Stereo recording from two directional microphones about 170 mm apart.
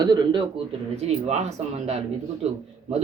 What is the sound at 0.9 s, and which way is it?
Speech, 40° right (ahead or behind).